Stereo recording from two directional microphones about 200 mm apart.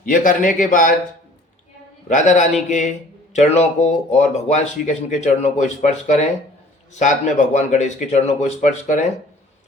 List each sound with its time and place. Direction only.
0.0 s speech: 45° left (ahead or behind)
2.0 s speech: 40° left (ahead or behind)